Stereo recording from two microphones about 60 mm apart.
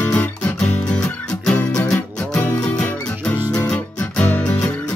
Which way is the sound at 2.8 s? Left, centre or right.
Left.